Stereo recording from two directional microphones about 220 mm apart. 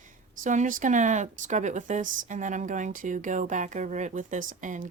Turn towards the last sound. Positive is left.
turn(degrees=-35)  # may be behind; listen again after turning